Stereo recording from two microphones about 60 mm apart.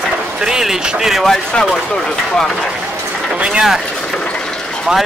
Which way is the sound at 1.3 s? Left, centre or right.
Centre.